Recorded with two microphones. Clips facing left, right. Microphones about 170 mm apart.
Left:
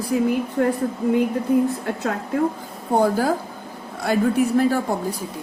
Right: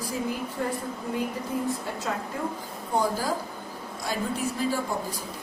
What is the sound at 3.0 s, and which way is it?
A woman's voice, 60° left (ahead or behind).